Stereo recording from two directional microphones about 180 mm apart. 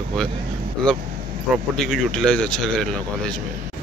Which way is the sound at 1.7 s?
5° left (ahead or behind).